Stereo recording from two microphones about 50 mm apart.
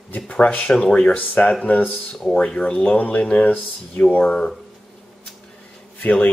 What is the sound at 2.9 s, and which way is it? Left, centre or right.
Speech, left.